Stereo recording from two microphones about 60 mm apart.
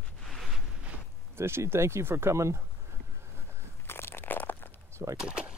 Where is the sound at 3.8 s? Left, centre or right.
Left.